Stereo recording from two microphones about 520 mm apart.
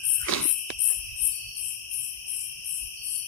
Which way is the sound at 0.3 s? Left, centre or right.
Left.